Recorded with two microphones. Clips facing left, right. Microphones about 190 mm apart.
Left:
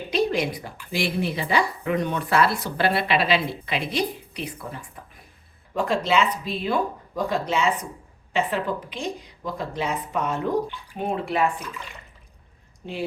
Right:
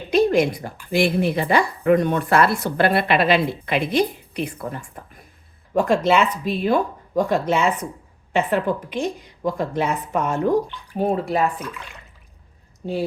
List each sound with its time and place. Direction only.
0.1 s a woman's voice: 50° right (ahead or behind)
11.7 s speech: centre (ahead or behind)
12.8 s a woman's voice: 40° right (ahead or behind)